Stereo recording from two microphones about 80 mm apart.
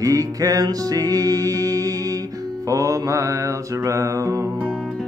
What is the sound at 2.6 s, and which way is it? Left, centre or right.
Mantra, right.